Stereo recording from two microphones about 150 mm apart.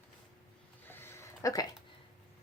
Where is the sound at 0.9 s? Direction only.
15° left (ahead or behind).